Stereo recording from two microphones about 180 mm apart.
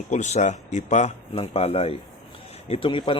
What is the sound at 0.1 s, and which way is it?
Speech, 40° left (ahead or behind).